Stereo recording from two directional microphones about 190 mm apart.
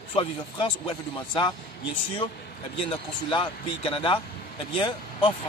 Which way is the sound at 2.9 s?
25° left (ahead or behind).